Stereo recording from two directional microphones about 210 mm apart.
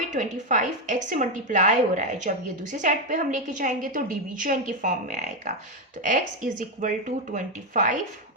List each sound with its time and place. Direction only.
0.1 s a woman's voice: 35° right (ahead or behind)